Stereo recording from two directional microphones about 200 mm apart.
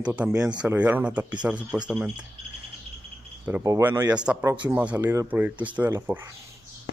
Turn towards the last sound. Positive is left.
turn(degrees=-10)  # may be behind; listen again after turning